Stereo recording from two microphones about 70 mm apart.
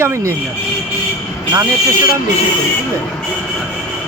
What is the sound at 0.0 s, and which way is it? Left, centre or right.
Speech, right.